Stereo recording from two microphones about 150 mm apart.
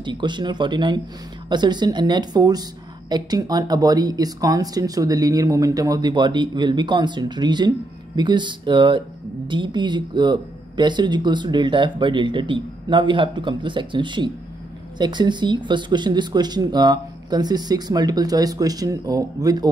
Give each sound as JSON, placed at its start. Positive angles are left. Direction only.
{"t": 0.0, "sound": "speech", "side_deg": -30}